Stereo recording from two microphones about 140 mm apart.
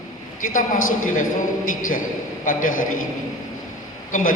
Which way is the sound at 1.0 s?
65° left (ahead or behind).